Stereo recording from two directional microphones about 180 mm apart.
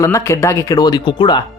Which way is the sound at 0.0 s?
15° left (ahead or behind).